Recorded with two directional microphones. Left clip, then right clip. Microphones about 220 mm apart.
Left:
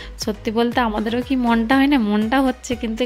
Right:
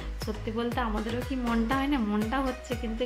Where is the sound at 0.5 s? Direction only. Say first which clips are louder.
Left 12 dB; 50° left (ahead or behind).